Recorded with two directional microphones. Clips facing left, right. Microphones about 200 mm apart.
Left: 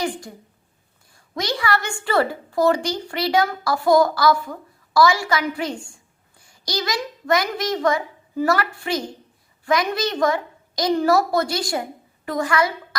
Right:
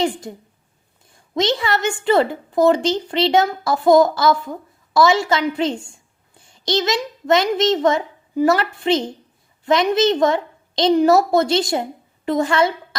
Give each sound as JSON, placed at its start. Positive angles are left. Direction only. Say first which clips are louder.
{"t": 0.0, "sound": "a woman's voice", "louder": "right 5 dB", "side_deg": -25}